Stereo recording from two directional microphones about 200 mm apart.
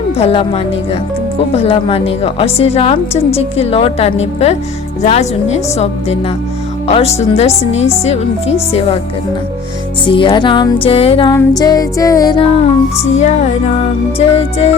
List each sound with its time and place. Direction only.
0.2 s a woman's voice: 30° left (ahead or behind)
1.6 s a woman's voice: 30° left (ahead or behind)
10.1 s a woman's voice: 25° left (ahead or behind)
13.1 s a woman's voice: 35° left (ahead or behind)